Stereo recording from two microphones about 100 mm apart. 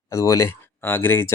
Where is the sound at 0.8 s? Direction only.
20° left (ahead or behind).